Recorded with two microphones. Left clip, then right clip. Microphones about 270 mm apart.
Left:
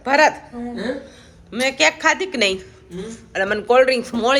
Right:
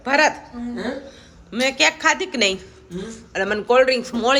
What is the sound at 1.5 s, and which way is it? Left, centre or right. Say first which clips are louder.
A woman's voice: left 1 dB; centre.